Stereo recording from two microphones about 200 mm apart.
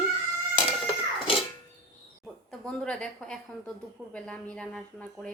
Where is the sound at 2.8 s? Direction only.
5° left (ahead or behind).